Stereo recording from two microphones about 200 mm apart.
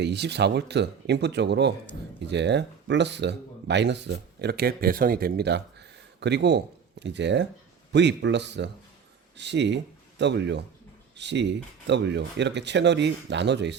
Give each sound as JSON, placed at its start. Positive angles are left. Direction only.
{"t": 0.0, "sound": "speech", "side_deg": -60}